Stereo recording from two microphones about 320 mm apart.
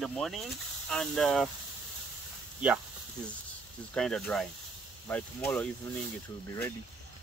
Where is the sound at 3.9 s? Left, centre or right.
Centre.